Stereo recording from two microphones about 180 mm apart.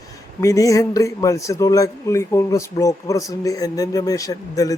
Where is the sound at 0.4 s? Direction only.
20° left (ahead or behind).